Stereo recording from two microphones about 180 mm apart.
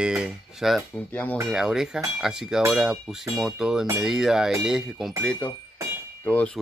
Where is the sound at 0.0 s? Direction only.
5° right (ahead or behind).